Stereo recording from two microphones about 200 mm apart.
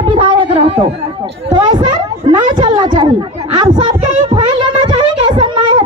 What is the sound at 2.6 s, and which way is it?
Chatter, 20° right (ahead or behind).